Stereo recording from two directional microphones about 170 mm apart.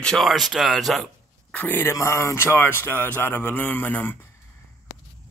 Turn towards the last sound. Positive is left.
turn(degrees=10)  # may be behind; listen again after turning